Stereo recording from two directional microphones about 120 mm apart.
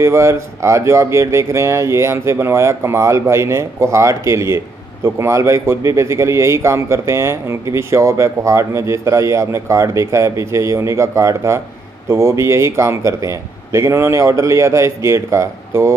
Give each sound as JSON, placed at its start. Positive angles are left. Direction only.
{"t": 0.0, "sound": "a man's voice", "side_deg": -20}